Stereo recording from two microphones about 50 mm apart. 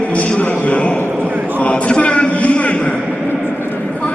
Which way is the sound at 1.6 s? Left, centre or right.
Left.